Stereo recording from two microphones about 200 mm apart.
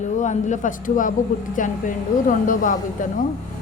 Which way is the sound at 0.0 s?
35° left (ahead or behind).